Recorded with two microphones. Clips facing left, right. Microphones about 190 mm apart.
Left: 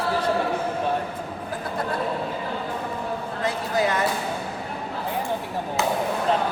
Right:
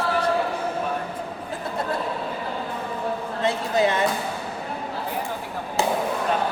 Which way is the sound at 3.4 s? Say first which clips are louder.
Right 3 dB; 25° right (ahead or behind).